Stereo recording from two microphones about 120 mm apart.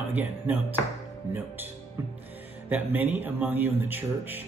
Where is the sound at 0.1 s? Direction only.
15° right (ahead or behind).